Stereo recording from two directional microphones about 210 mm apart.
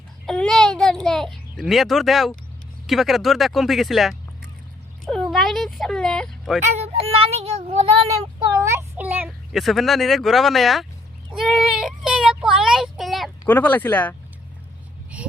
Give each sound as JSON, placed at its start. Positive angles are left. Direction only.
{"t": 0.3, "sound": "a child's voice", "side_deg": 0}
{"t": 5.0, "sound": "a sound", "side_deg": 0}
{"t": 6.7, "sound": "speech", "side_deg": -30}
{"t": 8.5, "sound": "a child's voice", "side_deg": -10}
{"t": 15.1, "sound": "speech", "side_deg": -5}